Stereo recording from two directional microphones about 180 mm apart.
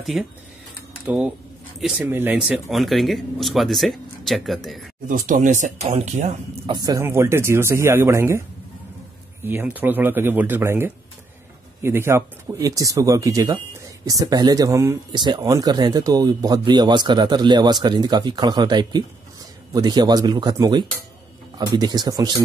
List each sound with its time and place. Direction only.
0.1 s speech: centre (ahead or behind)
5.0 s speech: 45° right (ahead or behind)
6.7 s speech: 20° right (ahead or behind)
9.4 s speech: 10° right (ahead or behind)